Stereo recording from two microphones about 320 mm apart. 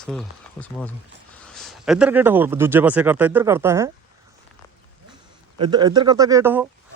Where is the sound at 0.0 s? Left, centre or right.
Centre.